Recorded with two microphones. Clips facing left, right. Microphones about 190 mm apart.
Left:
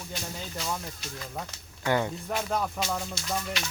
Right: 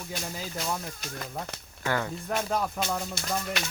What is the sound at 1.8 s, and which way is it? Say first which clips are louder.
Speech: left 3 dB; 20° left (ahead or behind).